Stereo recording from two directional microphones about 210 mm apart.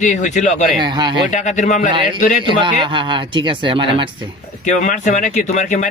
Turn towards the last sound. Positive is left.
turn(degrees=35)  # may be behind; listen again after turning